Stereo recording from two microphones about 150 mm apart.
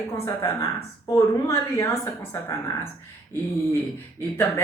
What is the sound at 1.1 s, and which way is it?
Speech, 20° left (ahead or behind).